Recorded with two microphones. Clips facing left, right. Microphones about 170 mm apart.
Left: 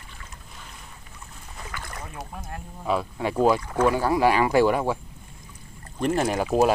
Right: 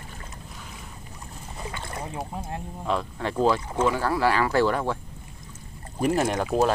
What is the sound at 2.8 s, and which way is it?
Speech, 10° left (ahead or behind).